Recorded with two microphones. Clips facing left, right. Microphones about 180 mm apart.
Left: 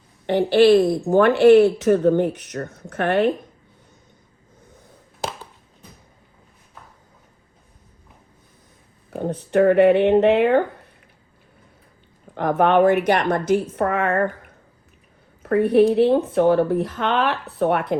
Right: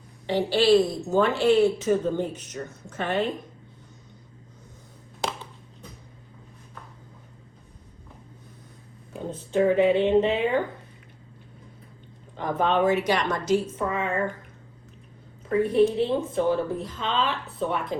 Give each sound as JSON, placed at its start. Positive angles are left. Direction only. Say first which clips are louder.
{"t": 0.3, "sound": "speech", "louder": "left 6 dB", "side_deg": 55}
{"t": 9.1, "sound": "speech", "louder": "left 6 dB", "side_deg": 65}
{"t": 12.3, "sound": "speech", "louder": "left 7 dB", "side_deg": 70}
{"t": 15.4, "sound": "speech", "louder": "left 5 dB", "side_deg": 65}